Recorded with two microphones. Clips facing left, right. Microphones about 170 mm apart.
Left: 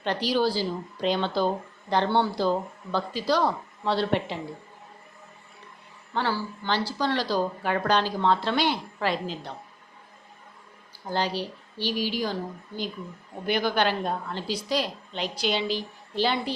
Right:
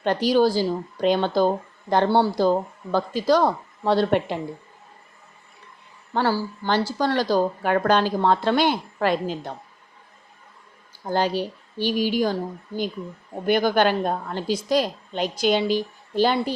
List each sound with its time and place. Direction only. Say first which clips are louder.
0.0 s speech: right 6 dB; 45° right (ahead or behind)
6.1 s speech: right 5 dB; 45° right (ahead or behind)
11.1 s speech: right 5 dB; 50° right (ahead or behind)